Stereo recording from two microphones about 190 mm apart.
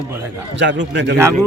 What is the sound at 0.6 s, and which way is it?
Speech, 70° right (ahead or behind).